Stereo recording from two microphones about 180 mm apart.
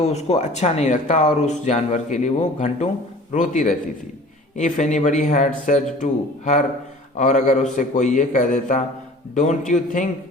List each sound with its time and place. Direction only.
0.0 s a man's voice: 35° left (ahead or behind)